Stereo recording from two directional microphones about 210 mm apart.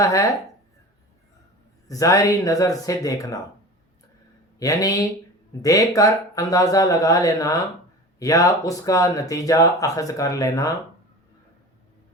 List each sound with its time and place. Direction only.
0.0 s speech: 15° left (ahead or behind)
1.9 s speech: 15° left (ahead or behind)
4.6 s speech: 15° left (ahead or behind)